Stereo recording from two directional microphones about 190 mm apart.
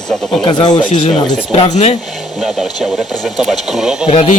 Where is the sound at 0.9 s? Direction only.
35° left (ahead or behind).